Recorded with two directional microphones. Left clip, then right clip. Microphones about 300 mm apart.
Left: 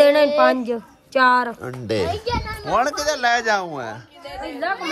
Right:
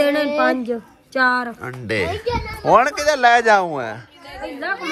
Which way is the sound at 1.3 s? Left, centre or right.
Left.